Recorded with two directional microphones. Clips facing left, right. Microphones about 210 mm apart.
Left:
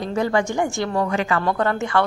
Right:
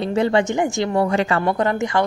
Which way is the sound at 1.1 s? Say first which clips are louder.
Right 2 dB; 30° right (ahead or behind).